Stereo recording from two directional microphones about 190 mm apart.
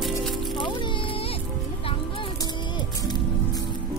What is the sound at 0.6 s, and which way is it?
Music, 25° left (ahead or behind).